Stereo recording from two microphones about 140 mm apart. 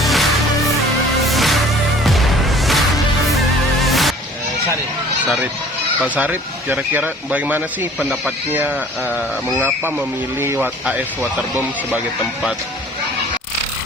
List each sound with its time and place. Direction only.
0.0 s music: centre (ahead or behind)
6.1 s speech: 10° right (ahead or behind)
7.9 s speech: centre (ahead or behind)
9.6 s speech: 15° right (ahead or behind)